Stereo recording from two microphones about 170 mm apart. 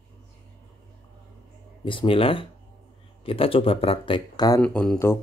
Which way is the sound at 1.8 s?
30° left (ahead or behind).